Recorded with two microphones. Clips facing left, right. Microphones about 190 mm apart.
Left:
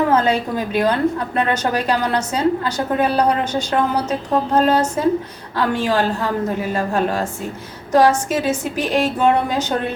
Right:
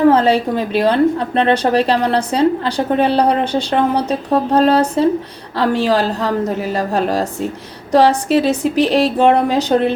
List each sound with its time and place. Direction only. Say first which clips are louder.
0.1 s a woman's voice: right 4 dB; 35° right (ahead or behind)